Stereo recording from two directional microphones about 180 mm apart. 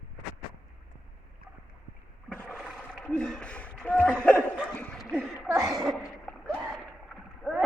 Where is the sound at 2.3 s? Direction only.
5° left (ahead or behind).